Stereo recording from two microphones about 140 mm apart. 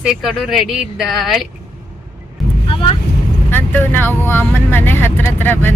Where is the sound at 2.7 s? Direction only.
40° left (ahead or behind).